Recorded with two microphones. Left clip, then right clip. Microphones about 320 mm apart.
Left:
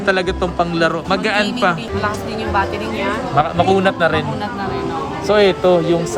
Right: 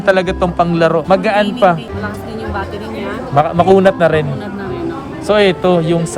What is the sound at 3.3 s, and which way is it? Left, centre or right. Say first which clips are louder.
Speech: right 5 dB; centre.